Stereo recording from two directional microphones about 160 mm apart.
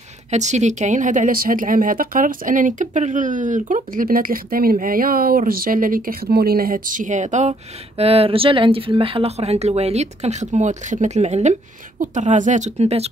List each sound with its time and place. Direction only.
0.3 s a woman's voice: 45° right (ahead or behind)
8.0 s speech: 35° right (ahead or behind)